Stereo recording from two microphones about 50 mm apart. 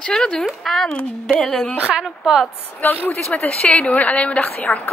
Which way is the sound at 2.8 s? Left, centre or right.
Left.